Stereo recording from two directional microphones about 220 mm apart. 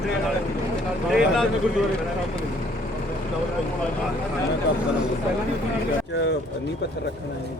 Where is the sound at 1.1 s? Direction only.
Centre (ahead or behind).